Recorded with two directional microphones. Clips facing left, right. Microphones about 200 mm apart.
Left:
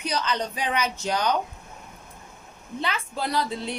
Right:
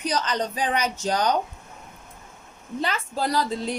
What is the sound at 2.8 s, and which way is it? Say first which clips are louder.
Speech: right 3 dB; 40° right (ahead or behind).